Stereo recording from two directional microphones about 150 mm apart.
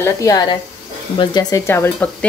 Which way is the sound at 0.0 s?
20° left (ahead or behind).